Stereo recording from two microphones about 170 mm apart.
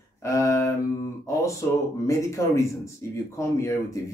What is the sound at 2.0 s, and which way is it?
Speech, 15° left (ahead or behind).